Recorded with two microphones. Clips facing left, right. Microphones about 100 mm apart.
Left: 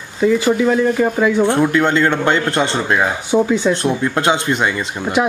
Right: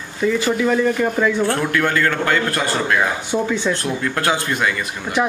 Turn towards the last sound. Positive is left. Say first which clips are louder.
# left 3 dB
turn(degrees=20)  # may be behind; listen again after turning